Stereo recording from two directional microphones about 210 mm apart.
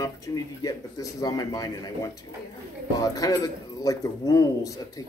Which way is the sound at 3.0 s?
15° left (ahead or behind).